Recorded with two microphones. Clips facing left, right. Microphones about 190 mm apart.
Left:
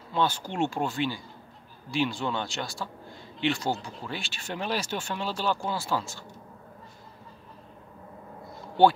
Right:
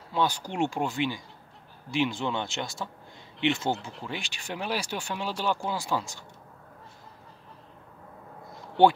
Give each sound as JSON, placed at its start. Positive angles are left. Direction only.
{"t": 0.1, "sound": "speech", "side_deg": -10}